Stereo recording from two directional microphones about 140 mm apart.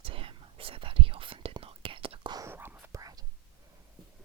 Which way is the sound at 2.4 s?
15° right (ahead or behind).